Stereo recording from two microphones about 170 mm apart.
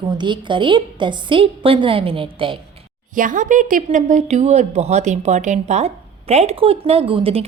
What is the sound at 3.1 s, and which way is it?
Speech, 50° right (ahead or behind).